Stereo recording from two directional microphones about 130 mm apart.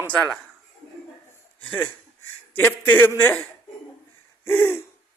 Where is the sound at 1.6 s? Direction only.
15° left (ahead or behind).